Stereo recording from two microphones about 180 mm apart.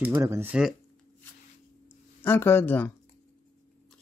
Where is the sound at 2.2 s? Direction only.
10° left (ahead or behind).